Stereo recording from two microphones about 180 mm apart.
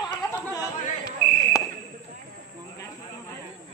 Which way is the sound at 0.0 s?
20° left (ahead or behind).